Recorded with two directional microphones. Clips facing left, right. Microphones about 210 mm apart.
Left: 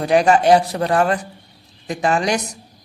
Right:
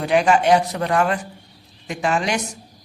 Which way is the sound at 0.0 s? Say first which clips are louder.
Left 2 dB; 40° left (ahead or behind).